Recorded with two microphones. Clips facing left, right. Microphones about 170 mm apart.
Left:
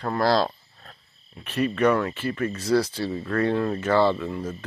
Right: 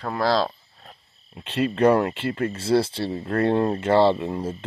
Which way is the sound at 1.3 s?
25° right (ahead or behind).